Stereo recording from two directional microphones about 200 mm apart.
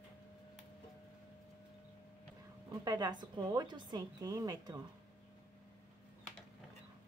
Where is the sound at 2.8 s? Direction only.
20° right (ahead or behind).